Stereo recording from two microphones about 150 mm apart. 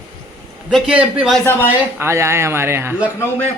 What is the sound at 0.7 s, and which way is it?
Speech, 5° right (ahead or behind).